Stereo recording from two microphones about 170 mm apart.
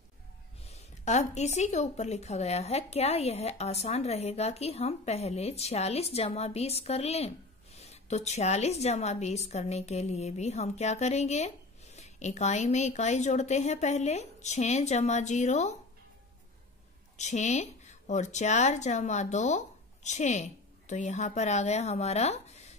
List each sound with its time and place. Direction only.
0.7 s speech: 40° left (ahead or behind)
17.2 s a woman's voice: 45° left (ahead or behind)